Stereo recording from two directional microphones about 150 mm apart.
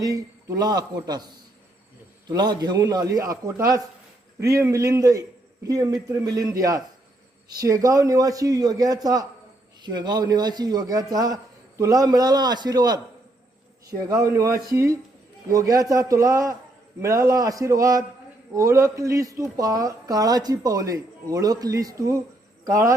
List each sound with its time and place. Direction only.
0.0 s speech: 25° right (ahead or behind)
14.1 s speech: 20° right (ahead or behind)